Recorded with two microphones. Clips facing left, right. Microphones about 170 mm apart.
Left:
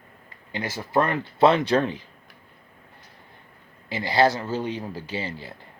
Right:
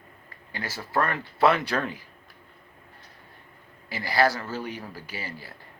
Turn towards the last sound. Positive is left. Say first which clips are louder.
# left 6 dB
turn(degrees=25)  # may be behind; listen again after turning